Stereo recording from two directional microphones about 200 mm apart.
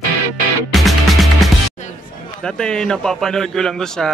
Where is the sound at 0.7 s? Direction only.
Centre (ahead or behind).